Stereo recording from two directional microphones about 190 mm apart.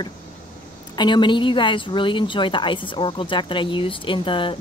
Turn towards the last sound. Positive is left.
turn(degrees=25)  # may be behind; listen again after turning